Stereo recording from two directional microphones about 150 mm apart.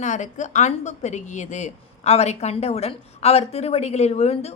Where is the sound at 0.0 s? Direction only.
55° left (ahead or behind).